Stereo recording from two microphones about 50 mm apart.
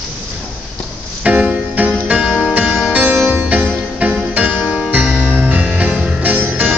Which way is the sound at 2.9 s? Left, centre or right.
Right.